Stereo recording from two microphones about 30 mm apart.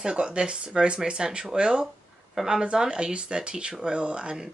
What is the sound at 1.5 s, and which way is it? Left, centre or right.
Speech, right.